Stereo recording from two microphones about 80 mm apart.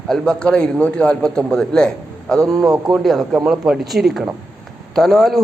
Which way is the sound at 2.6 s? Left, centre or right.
Right.